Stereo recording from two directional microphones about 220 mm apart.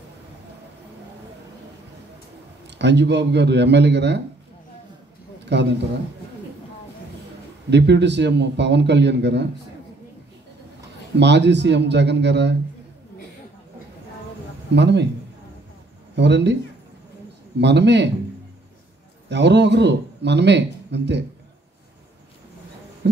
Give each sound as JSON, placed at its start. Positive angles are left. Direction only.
{"t": 2.6, "sound": "a man's voice", "side_deg": -50}
{"t": 5.4, "sound": "a sound", "side_deg": -50}
{"t": 7.7, "sound": "a man's voice", "side_deg": -50}
{"t": 11.1, "sound": "a man's voice", "side_deg": -50}
{"t": 14.7, "sound": "a man's voice", "side_deg": -50}
{"t": 16.2, "sound": "a man's voice", "side_deg": -50}
{"t": 17.6, "sound": "a man's voice", "side_deg": -50}
{"t": 19.2, "sound": "speech", "side_deg": -50}